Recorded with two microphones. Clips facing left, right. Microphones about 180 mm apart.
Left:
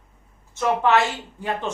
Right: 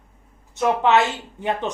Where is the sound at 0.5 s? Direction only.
20° right (ahead or behind).